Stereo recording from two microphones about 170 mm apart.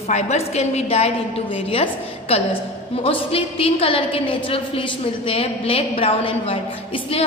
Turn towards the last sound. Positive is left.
turn(degrees=35)  # may be behind; listen again after turning